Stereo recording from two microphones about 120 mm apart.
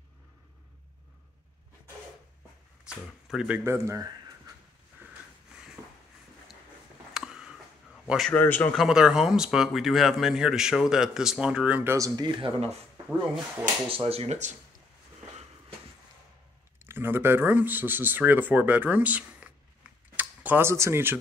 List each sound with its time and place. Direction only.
2.8 s speech: 5° right (ahead or behind)
3.6 s speech: 25° right (ahead or behind)
7.2 s a sound: 5° right (ahead or behind)
8.3 s speech: 15° left (ahead or behind)
8.7 s speech: 5° right (ahead or behind)
12.2 s speech: 40° right (ahead or behind)
13.8 s speech: 55° right (ahead or behind); by 14.6 s 70° right (ahead or behind)
16.8 s speech: 20° right (ahead or behind)